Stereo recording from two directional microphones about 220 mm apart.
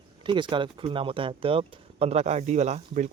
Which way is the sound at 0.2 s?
20° right (ahead or behind).